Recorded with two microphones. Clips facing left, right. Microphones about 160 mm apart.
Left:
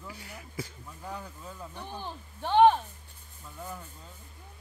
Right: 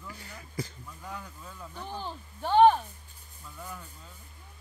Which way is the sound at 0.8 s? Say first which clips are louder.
Left 2 dB; 30° left (ahead or behind).